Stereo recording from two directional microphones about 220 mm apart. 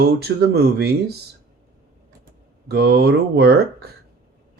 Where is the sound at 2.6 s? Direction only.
45° right (ahead or behind).